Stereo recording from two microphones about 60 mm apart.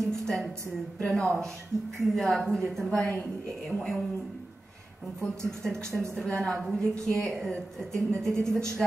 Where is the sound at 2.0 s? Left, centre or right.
Centre.